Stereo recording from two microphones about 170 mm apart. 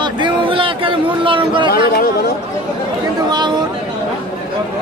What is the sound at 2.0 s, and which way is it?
Chatter, 60° left (ahead or behind).